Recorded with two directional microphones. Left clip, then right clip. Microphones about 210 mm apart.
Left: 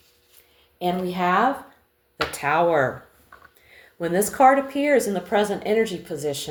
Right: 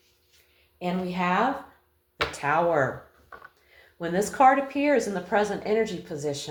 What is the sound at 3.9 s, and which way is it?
Speech, 40° left (ahead or behind).